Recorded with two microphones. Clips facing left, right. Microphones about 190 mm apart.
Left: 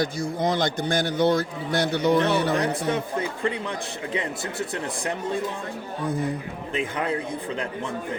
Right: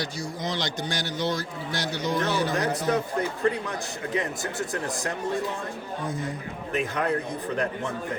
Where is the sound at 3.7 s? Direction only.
30° left (ahead or behind).